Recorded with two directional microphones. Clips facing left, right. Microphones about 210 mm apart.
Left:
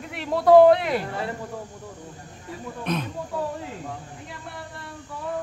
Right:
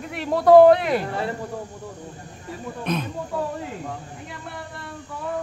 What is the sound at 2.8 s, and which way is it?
Speech, centre (ahead or behind).